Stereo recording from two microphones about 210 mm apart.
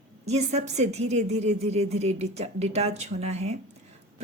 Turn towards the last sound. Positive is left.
turn(degrees=-30)  # may be behind; listen again after turning